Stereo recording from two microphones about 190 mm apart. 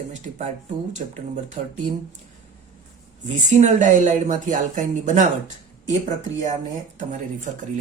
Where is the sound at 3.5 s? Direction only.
40° right (ahead or behind).